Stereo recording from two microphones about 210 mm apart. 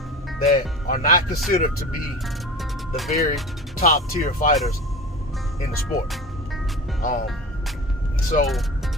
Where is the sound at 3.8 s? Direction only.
45° left (ahead or behind).